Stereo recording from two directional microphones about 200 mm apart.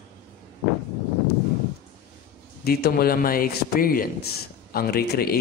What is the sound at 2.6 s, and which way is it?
A man's voice, 50° left (ahead or behind).